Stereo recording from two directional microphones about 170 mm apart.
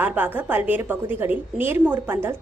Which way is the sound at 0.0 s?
10° right (ahead or behind).